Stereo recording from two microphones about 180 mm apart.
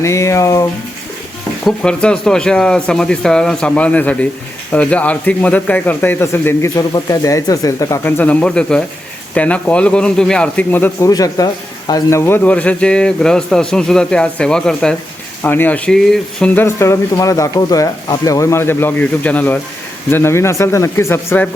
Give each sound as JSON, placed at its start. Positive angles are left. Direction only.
{"t": 0.0, "sound": "speech", "side_deg": 15}
{"t": 1.6, "sound": "a man's voice", "side_deg": 5}
{"t": 16.6, "sound": "speech", "side_deg": 15}